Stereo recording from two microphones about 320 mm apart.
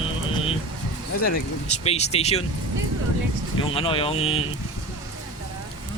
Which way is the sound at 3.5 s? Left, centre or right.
Centre.